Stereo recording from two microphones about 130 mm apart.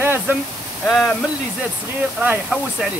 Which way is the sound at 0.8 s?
5° left (ahead or behind).